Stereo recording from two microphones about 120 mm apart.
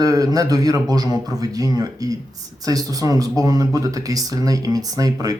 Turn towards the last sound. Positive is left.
turn(degrees=-30)  # may be behind; listen again after turning